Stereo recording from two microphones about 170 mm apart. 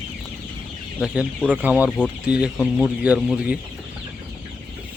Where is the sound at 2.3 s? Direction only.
5° right (ahead or behind).